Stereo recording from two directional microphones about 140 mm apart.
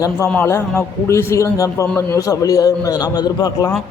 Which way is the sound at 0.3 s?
15° left (ahead or behind).